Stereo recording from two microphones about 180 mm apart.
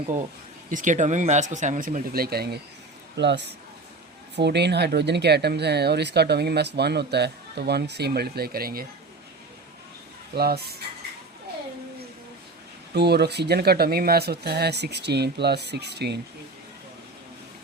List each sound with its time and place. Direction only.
0.7 s speech: 45° right (ahead or behind); by 2.6 s 60° right (ahead or behind)
3.2 s speech: 75° right (ahead or behind); by 8.9 s 55° right (ahead or behind)
10.3 s speech: 60° right (ahead or behind)
12.9 s speech: 65° right (ahead or behind)